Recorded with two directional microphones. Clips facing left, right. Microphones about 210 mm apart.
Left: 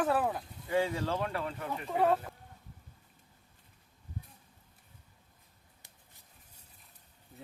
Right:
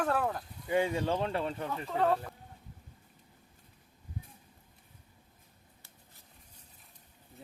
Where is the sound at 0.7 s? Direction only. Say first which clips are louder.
Right 1 dB; 15° right (ahead or behind).